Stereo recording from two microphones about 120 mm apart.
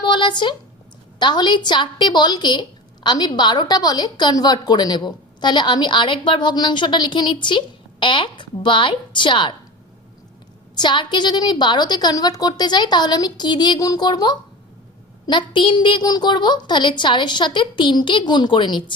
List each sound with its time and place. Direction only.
0.0 s a sound: 40° left (ahead or behind)
1.2 s a woman's voice: 40° left (ahead or behind)
10.8 s a woman's voice: 40° left (ahead or behind)